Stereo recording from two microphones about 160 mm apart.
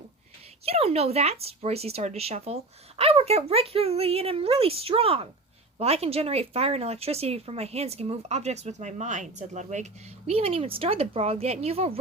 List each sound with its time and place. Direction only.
0.6 s speech: 40° right (ahead or behind)